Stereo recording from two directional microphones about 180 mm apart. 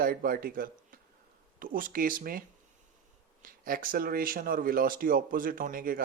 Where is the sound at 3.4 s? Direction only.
50° right (ahead or behind).